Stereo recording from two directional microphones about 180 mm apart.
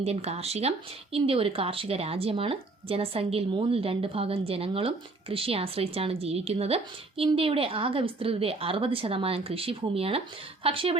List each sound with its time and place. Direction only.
0.0 s speech: 35° right (ahead or behind)